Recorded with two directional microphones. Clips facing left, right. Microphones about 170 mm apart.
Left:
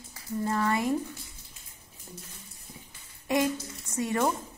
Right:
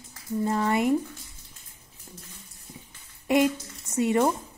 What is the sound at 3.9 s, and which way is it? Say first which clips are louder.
Speech: right 5 dB; 25° right (ahead or behind).